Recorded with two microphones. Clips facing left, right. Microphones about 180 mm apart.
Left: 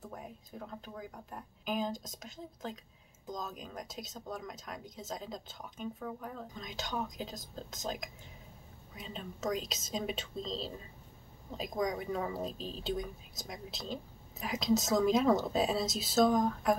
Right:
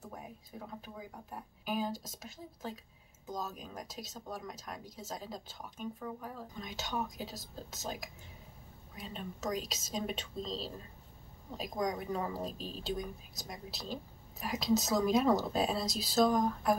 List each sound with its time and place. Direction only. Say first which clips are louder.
0.0 s speech: left 1 dB; centre (ahead or behind)